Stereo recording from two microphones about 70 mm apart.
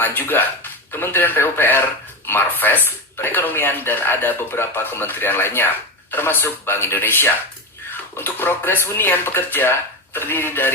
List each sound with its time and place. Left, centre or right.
0.0 s speech: left